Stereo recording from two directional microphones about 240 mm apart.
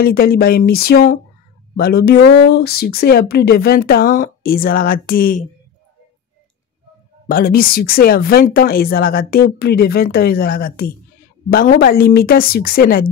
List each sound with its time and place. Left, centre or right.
0.0 s speech: left
7.2 s speech: left